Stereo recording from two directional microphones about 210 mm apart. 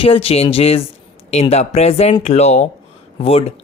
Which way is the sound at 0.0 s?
25° left (ahead or behind).